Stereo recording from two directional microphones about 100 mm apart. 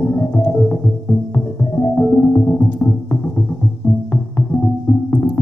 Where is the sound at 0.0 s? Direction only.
25° left (ahead or behind).